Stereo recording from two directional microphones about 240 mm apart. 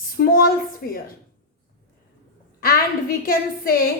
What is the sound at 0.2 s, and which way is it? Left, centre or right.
Speech, left.